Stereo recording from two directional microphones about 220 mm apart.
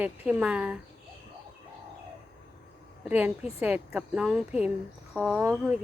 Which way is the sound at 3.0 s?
5° right (ahead or behind).